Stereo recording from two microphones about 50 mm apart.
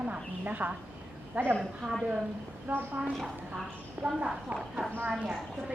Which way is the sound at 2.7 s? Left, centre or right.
Right.